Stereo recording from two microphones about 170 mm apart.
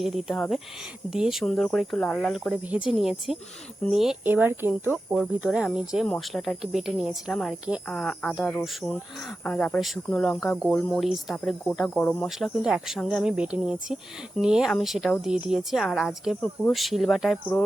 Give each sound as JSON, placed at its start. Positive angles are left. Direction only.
{"t": 0.0, "sound": "speech", "side_deg": 0}
{"t": 12.4, "sound": "speech", "side_deg": -5}